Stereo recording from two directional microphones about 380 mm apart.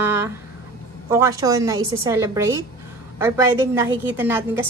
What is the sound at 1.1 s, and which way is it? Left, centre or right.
A woman's voice, centre.